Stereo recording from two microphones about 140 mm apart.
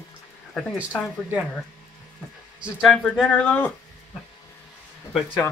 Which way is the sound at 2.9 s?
5° left (ahead or behind).